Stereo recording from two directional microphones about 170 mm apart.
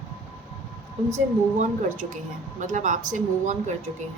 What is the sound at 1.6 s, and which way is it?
Speech, 45° right (ahead or behind).